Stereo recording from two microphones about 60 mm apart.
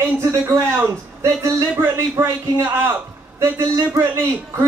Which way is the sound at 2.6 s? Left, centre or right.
Right.